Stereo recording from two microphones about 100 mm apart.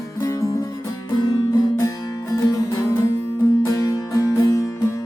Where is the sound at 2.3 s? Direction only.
35° left (ahead or behind).